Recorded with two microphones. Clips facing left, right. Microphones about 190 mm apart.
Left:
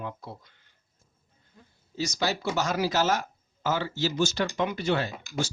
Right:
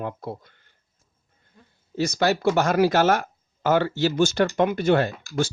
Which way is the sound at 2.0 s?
55° right (ahead or behind).